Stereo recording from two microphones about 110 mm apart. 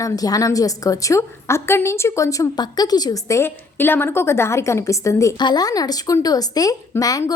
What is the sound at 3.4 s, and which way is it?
A woman's voice, 20° left (ahead or behind).